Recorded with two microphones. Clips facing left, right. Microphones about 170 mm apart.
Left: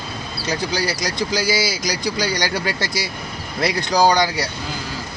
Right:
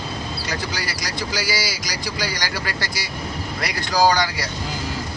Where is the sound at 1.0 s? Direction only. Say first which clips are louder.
Left 5 dB; 20° left (ahead or behind).